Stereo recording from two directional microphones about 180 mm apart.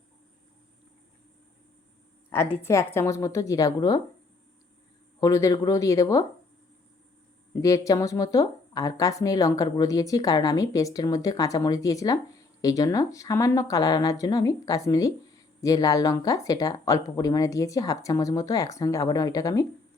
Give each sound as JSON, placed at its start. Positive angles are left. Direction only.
{"t": 2.3, "sound": "a woman's voice", "side_deg": 15}
{"t": 5.2, "sound": "a woman's voice", "side_deg": 15}
{"t": 7.6, "sound": "speech", "side_deg": 20}